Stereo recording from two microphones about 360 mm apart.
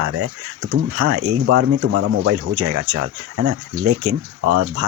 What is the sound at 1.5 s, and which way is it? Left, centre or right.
Speech, right.